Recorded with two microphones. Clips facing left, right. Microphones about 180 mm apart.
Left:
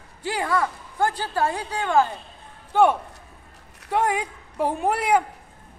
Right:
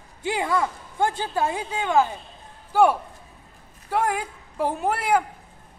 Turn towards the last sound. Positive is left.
turn(degrees=0)  # may be behind; listen again after turning